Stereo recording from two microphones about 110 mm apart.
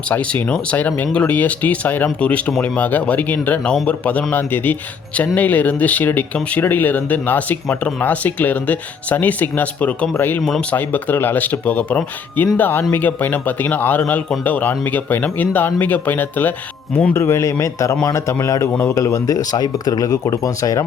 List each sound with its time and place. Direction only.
0.1 s a man's voice: 15° left (ahead or behind)
10.4 s speech: 5° left (ahead or behind)
10.8 s a man's voice: 20° left (ahead or behind)
17.2 s a man's voice: 25° left (ahead or behind)